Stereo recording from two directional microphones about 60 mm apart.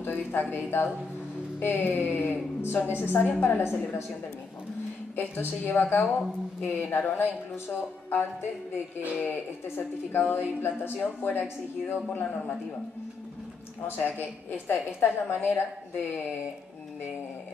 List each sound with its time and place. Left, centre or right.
0.0 s speech: left
5.1 s speech: left
13.8 s speech: left